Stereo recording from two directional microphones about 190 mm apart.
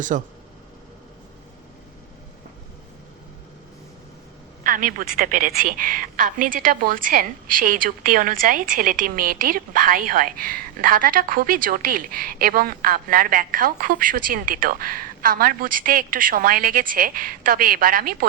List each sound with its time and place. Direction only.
0.1 s a woman's voice: 45° right (ahead or behind)
4.6 s a woman's voice: 45° right (ahead or behind)